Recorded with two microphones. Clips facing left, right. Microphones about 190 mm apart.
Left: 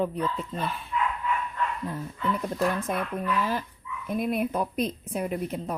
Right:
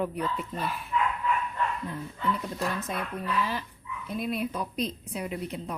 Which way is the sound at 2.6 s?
50° left (ahead or behind).